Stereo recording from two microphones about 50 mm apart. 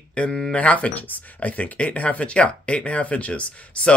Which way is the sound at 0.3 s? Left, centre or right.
Centre.